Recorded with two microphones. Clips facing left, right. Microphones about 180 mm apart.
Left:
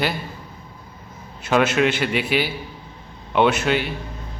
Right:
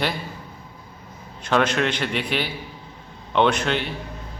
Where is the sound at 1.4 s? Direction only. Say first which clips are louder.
Left 3 dB; 5° left (ahead or behind).